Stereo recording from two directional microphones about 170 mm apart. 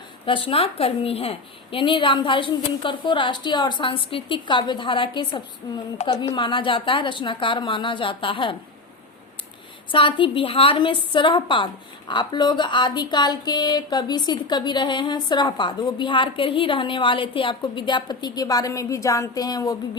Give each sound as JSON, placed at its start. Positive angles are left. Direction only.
{"t": 0.3, "sound": "a woman's voice", "side_deg": 30}
{"t": 9.9, "sound": "a woman's voice", "side_deg": 30}